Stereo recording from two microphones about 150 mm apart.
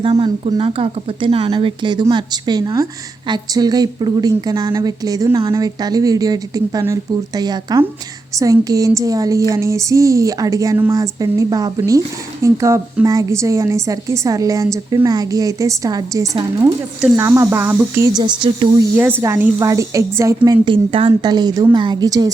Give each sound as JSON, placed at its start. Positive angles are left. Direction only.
{"t": 0.0, "sound": "speech", "side_deg": -35}
{"t": 18.2, "sound": "speech", "side_deg": -30}
{"t": 18.9, "sound": "speech", "side_deg": -15}